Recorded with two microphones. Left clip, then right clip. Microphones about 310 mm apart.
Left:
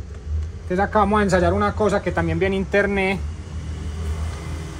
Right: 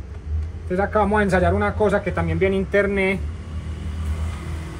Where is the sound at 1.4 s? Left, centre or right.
Left.